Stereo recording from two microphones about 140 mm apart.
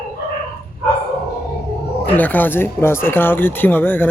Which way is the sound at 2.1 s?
10° left (ahead or behind).